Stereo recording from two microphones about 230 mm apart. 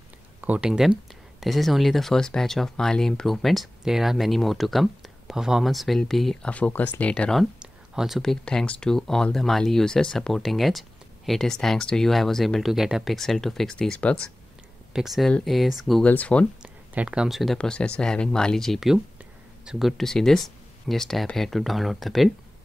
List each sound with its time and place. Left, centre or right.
0.4 s speech: centre
16.6 s speech: centre